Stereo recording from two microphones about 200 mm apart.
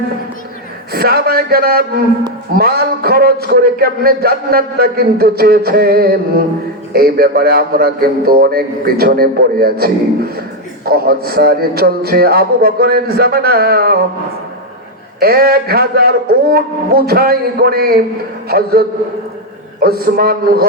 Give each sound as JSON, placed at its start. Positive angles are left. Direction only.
{"t": 0.9, "sound": "a man's voice", "side_deg": -50}
{"t": 15.2, "sound": "a man's voice", "side_deg": -50}